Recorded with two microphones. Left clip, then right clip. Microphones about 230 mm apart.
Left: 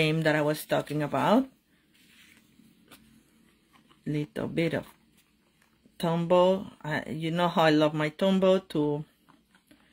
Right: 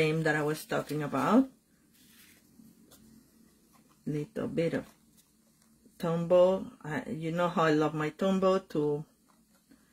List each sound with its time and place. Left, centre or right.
0.0 s speech: left
4.0 s speech: left
6.0 s speech: left